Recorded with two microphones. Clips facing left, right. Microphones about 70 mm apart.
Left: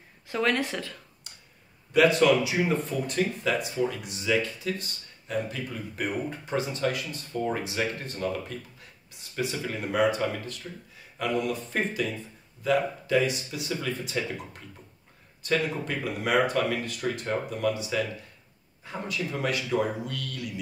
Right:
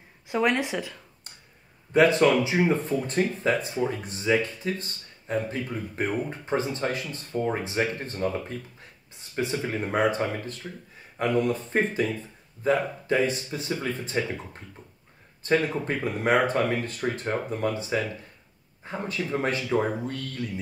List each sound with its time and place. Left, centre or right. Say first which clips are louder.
0.3 s speech: right 2 dB; centre
2.0 s speech: right 1 dB; right